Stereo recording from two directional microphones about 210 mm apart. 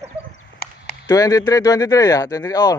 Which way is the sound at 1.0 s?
15° left (ahead or behind).